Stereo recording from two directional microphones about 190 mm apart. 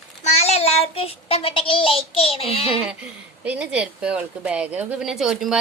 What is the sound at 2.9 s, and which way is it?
Speech, 5° right (ahead or behind).